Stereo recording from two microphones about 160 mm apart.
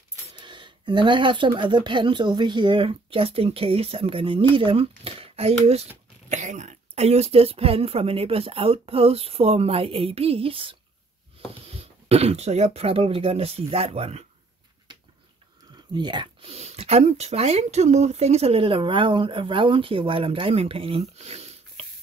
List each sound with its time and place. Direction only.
0.4 s speech: 30° right (ahead or behind)
6.3 s speech: 50° right (ahead or behind)
14.9 s a sound: 30° right (ahead or behind)
15.7 s speech: 30° right (ahead or behind)